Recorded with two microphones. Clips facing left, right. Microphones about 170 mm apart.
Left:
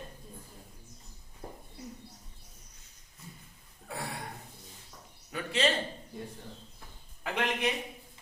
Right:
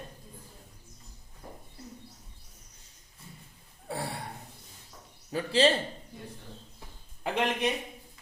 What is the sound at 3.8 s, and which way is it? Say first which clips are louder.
Gasp: right 4 dB; 30° right (ahead or behind).